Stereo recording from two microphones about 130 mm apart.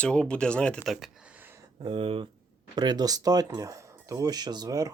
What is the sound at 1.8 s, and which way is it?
Speech, 45° right (ahead or behind).